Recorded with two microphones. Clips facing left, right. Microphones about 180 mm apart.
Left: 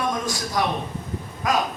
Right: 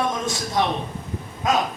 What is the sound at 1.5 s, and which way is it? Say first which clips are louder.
Speech: right 1 dB; 25° right (ahead or behind).